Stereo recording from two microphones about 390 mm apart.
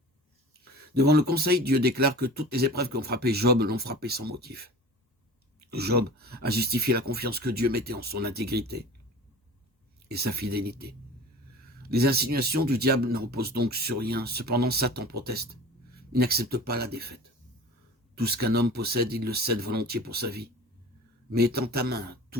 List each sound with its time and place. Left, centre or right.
0.6 s speech: right
10.1 s speech: right